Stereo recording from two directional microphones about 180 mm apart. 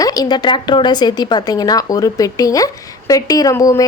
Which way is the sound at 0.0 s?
20° left (ahead or behind).